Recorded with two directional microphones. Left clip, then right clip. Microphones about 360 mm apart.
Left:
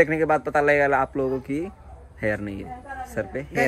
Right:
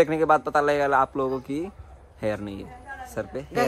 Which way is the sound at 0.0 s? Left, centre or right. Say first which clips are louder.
Even; centre.